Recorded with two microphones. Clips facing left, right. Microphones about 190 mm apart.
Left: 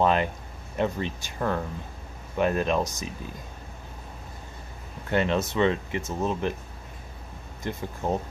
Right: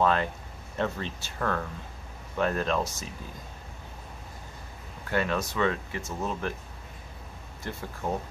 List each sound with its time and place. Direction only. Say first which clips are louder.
0.0 s speech: left 2 dB; 20° left (ahead or behind)
5.1 s speech: left 4 dB; 25° left (ahead or behind)
7.7 s speech: left 4 dB; 20° left (ahead or behind)